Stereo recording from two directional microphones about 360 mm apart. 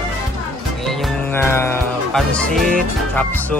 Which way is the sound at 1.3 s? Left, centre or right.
Centre.